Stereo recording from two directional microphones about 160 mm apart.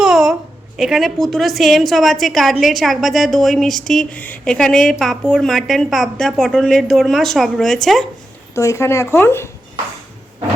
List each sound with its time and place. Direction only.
0.0 s a sound: 5° right (ahead or behind)
0.8 s a woman's voice: centre (ahead or behind)
8.5 s speech: 20° left (ahead or behind)